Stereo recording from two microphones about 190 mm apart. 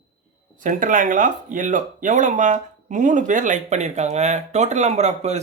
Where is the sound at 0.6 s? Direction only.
45° right (ahead or behind).